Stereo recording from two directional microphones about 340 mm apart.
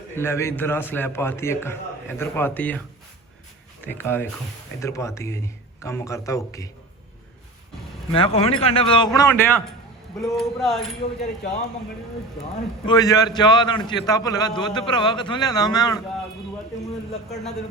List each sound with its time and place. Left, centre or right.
0.2 s a man's voice: centre
3.8 s a man's voice: centre
8.1 s a man's voice: centre
12.8 s a man's voice: centre